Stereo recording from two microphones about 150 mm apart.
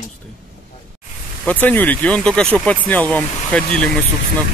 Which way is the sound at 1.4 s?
10° left (ahead or behind).